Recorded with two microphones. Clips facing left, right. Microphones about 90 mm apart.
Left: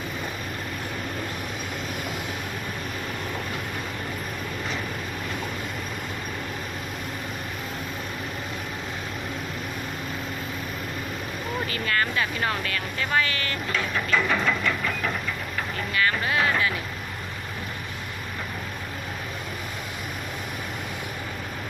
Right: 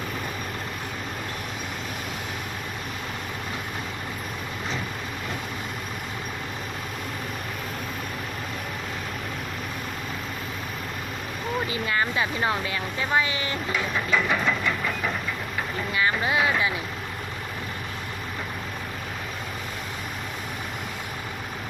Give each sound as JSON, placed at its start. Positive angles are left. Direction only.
{"t": 11.7, "sound": "speech", "side_deg": -15}